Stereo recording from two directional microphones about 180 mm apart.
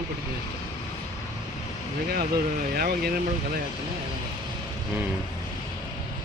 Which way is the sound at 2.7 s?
55° right (ahead or behind).